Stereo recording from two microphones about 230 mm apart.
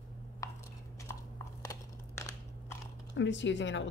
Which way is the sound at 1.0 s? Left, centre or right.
Centre.